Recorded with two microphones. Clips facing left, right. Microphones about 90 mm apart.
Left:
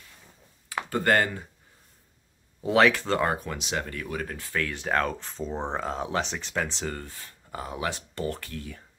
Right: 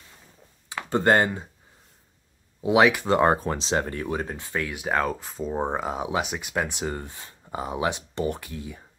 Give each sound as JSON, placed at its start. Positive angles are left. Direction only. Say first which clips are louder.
{"t": 0.8, "sound": "speech", "louder": "right 4 dB", "side_deg": -25}
{"t": 2.6, "sound": "speech", "louder": "right 2 dB", "side_deg": -15}
{"t": 3.3, "sound": "speech", "louder": "right 7 dB", "side_deg": -30}